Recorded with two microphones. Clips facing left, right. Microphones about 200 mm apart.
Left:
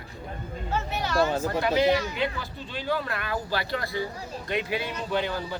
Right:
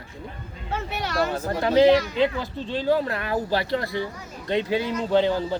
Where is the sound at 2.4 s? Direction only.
30° right (ahead or behind).